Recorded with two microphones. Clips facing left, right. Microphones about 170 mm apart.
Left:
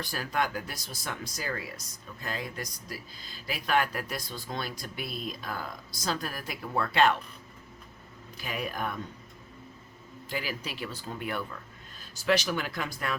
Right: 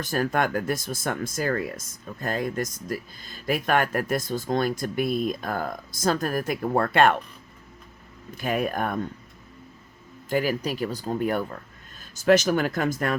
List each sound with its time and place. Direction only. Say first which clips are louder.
0.0 s speech: right 7 dB; 45° right (ahead or behind)
8.4 s speech: right 9 dB; 50° right (ahead or behind)
10.2 s speech: right 11 dB; 45° right (ahead or behind)